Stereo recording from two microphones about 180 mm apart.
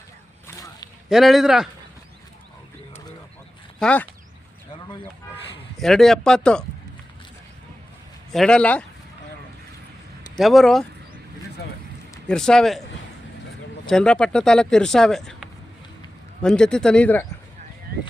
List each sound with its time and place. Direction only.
0.4 s whip: 20° left (ahead or behind)
1.1 s speech: centre (ahead or behind)
3.8 s speech: 5° left (ahead or behind)
5.8 s speech: centre (ahead or behind)
8.3 s speech: 5° left (ahead or behind)
10.3 s speech: centre (ahead or behind)
12.3 s speech: 5° left (ahead or behind)
13.8 s speech: 5° left (ahead or behind)